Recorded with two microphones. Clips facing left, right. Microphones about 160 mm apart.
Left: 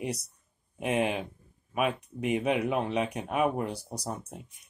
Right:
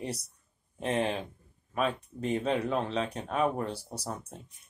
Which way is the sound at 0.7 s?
10° left (ahead or behind).